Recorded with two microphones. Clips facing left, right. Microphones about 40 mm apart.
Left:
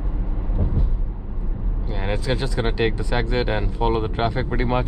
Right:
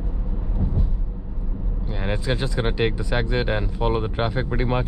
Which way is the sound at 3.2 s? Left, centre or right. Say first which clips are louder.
Left 1 dB; centre.